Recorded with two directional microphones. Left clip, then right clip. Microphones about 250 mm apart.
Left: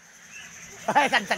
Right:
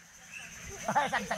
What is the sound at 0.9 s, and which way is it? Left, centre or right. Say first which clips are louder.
Speech: left 8 dB; left.